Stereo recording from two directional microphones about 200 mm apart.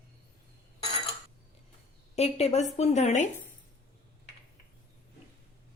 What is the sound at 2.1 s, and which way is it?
Speech, 30° left (ahead or behind).